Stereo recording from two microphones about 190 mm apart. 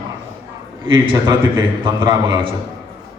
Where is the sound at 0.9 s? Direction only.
25° right (ahead or behind).